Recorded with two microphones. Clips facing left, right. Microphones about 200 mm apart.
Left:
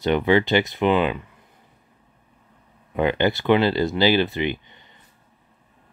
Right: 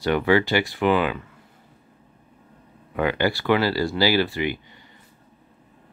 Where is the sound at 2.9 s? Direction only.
20° left (ahead or behind).